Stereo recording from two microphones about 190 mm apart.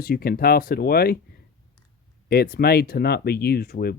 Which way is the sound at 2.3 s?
55° left (ahead or behind).